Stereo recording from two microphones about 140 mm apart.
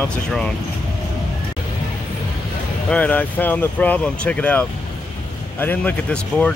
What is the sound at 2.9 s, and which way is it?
Speech, 10° left (ahead or behind).